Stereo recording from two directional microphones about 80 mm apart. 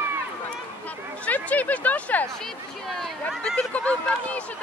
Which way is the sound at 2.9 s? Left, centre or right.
Centre.